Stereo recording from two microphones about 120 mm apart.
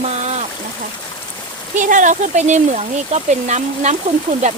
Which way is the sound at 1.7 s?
90° right.